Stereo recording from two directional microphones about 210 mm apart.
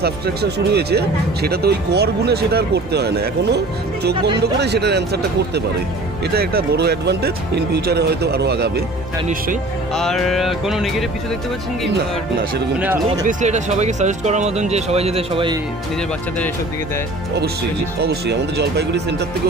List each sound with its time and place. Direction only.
0.0 s speech: 50° right (ahead or behind)
9.9 s music: centre (ahead or behind)
12.7 s speech: 5° right (ahead or behind)
13.3 s speech: 35° right (ahead or behind)
18.0 s speech: 50° right (ahead or behind)